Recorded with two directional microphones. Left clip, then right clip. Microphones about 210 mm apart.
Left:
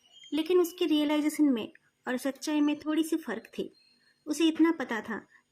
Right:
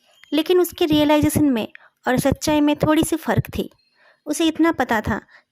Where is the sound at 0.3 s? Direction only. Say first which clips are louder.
Right 9 dB; 45° right (ahead or behind).